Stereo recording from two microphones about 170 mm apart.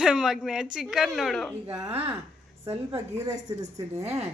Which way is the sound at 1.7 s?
20° right (ahead or behind).